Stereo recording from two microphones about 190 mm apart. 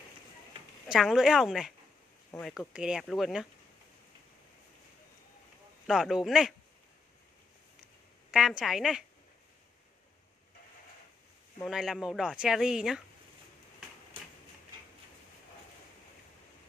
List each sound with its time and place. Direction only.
0.8 s speech: centre (ahead or behind)
5.9 s speech: centre (ahead or behind)
8.3 s speech: 5° right (ahead or behind)
11.6 s speech: centre (ahead or behind)